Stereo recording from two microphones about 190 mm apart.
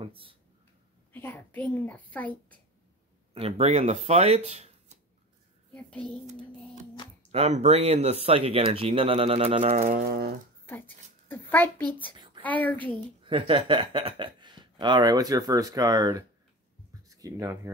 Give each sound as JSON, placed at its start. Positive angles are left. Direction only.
{"t": 0.0, "sound": "speech", "side_deg": -30}
{"t": 1.1, "sound": "a child's voice", "side_deg": 10}
{"t": 3.3, "sound": "speech", "side_deg": -30}
{"t": 5.7, "sound": "a sound", "side_deg": 5}
{"t": 7.2, "sound": "speech", "side_deg": -35}
{"t": 9.8, "sound": "speech", "side_deg": -45}
{"t": 10.7, "sound": "a child's voice", "side_deg": 10}
{"t": 12.7, "sound": "speech", "side_deg": -25}